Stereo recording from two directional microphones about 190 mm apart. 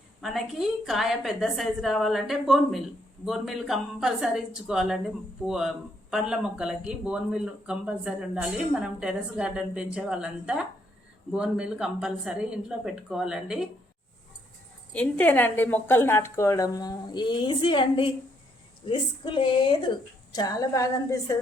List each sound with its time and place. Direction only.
0.2 s speech: centre (ahead or behind)
14.9 s a woman's voice: 5° left (ahead or behind)